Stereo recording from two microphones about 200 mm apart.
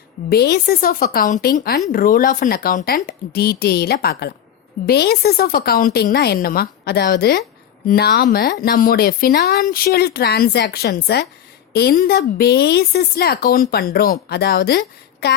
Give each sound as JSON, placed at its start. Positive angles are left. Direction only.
{"t": 0.3, "sound": "a woman's voice", "side_deg": 55}